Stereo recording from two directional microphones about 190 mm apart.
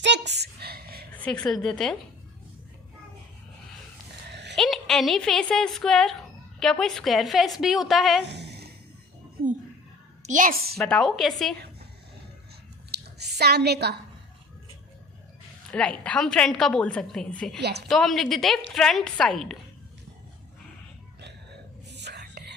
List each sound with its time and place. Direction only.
0.0 s a sound: 65° right (ahead or behind)
1.1 s a woman's voice: 5° left (ahead or behind)
4.3 s a sound: 65° right (ahead or behind)
4.5 s a woman's voice: centre (ahead or behind)
8.2 s a sound: 65° right (ahead or behind)
10.2 s a woman's voice: 45° right (ahead or behind)
10.8 s a woman's voice: 5° left (ahead or behind)
13.1 s a woman's voice: 60° right (ahead or behind)
15.7 s a woman's voice: 5° left (ahead or behind)
17.6 s a woman's voice: 60° right (ahead or behind)
17.8 s a woman's voice: centre (ahead or behind)
21.8 s whispering: 65° right (ahead or behind)